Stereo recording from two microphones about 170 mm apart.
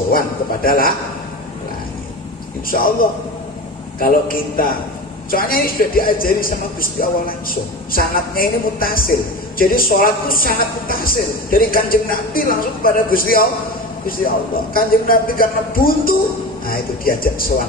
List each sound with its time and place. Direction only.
0.7 s a woman's voice: 60° left (ahead or behind)
2.7 s a woman's voice: 60° left (ahead or behind)